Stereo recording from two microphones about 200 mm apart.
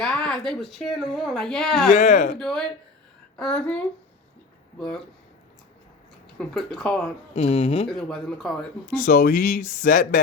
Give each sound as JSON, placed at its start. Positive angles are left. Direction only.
{"t": 0.0, "sound": "speech", "side_deg": 5}
{"t": 1.9, "sound": "speech", "side_deg": 40}
{"t": 2.4, "sound": "speech", "side_deg": 5}
{"t": 6.5, "sound": "speech", "side_deg": 5}
{"t": 7.3, "sound": "speech", "side_deg": 30}
{"t": 7.9, "sound": "speech", "side_deg": 5}
{"t": 9.0, "sound": "speech", "side_deg": 45}